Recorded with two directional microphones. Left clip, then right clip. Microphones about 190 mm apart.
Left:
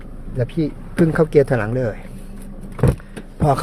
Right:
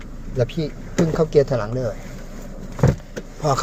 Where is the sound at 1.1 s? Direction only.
40° left (ahead or behind).